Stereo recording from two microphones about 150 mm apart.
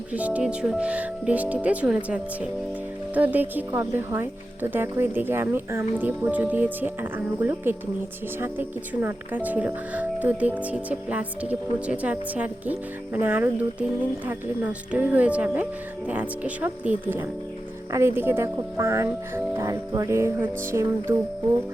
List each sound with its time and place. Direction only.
0.1 s speech: 10° right (ahead or behind)
19.5 s music: 20° right (ahead or behind)